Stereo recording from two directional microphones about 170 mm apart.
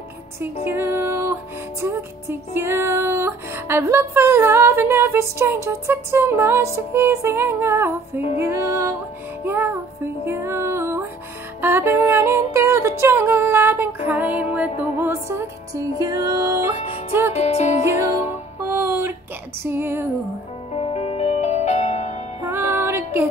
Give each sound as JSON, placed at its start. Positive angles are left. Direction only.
{"t": 0.7, "sound": "music", "side_deg": -15}
{"t": 17.4, "sound": "music", "side_deg": 40}
{"t": 18.6, "sound": "music", "side_deg": -15}
{"t": 20.7, "sound": "music", "side_deg": 35}
{"t": 22.5, "sound": "music", "side_deg": -15}